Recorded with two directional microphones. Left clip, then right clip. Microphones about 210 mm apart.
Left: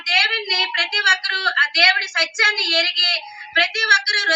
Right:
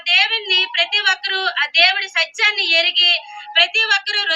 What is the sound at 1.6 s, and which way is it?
A woman's voice, 5° right (ahead or behind).